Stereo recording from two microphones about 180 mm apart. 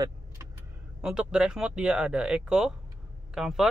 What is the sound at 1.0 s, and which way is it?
Speech, 5° right (ahead or behind).